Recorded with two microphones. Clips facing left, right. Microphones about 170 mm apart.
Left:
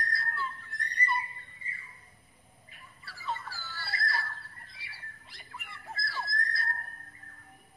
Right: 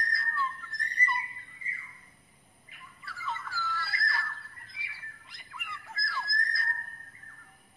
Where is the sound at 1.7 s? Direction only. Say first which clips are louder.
Right 1 dB; 35° left (ahead or behind).